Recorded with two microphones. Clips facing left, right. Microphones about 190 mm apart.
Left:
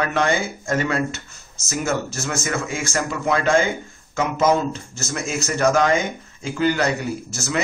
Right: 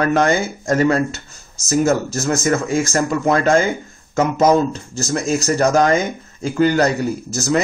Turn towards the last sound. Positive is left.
turn(degrees=-40)  # may be behind; listen again after turning